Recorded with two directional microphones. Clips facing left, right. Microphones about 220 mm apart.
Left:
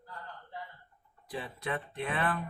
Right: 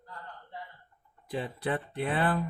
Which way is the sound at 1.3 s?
30° right (ahead or behind).